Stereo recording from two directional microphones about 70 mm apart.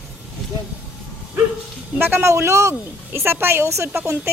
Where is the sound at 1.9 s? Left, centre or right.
Right.